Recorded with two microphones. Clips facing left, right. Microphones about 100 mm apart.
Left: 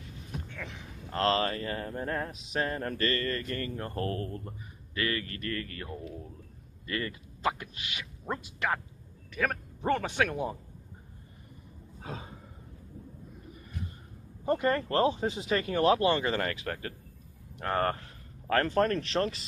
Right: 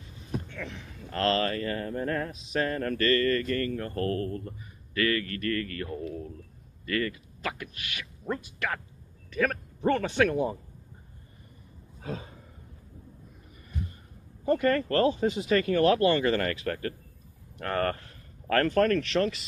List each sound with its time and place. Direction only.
0.5 s a sound: 5° left (ahead or behind)
1.1 s speech: 20° left (ahead or behind)
6.9 s speech: 25° left (ahead or behind)
9.3 s a man's voice: 10° left (ahead or behind)
12.0 s a sound: 15° left (ahead or behind)
14.4 s speech: 25° left (ahead or behind)